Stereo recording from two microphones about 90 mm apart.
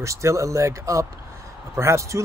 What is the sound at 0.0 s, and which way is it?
Speech, 35° right (ahead or behind).